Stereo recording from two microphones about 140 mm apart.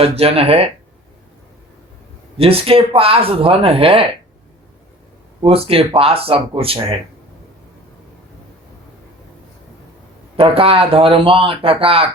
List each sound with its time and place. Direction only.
0.0 s speech: 45° right (ahead or behind)
2.4 s speech: 45° right (ahead or behind)
5.4 s speech: 40° right (ahead or behind)
10.3 s speech: 40° right (ahead or behind)